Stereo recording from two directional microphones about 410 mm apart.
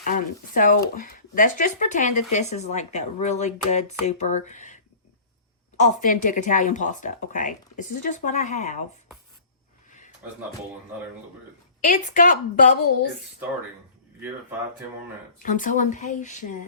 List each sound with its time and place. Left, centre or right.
0.0 s speech: centre
5.8 s speech: centre
11.9 s speech: centre
15.4 s speech: centre